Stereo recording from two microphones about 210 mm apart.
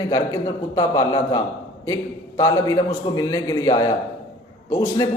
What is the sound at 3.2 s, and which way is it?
Speech, 15° left (ahead or behind).